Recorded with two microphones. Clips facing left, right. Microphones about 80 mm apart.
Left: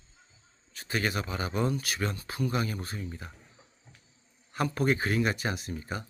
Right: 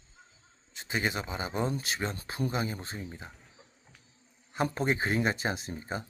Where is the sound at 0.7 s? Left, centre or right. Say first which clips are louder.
Left 1 dB; right.